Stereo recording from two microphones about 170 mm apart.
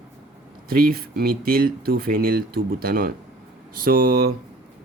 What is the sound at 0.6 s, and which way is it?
Speech, 60° right (ahead or behind).